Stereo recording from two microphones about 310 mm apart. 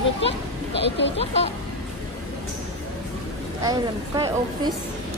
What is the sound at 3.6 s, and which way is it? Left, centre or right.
A woman's voice, centre.